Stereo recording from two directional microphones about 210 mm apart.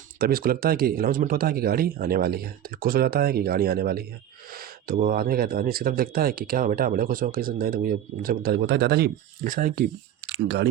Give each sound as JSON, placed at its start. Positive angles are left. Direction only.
{"t": 0.2, "sound": "speech", "side_deg": -45}
{"t": 10.3, "sound": "speech", "side_deg": -55}